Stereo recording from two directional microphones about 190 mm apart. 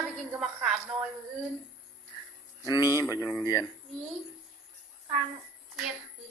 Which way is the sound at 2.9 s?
15° left (ahead or behind).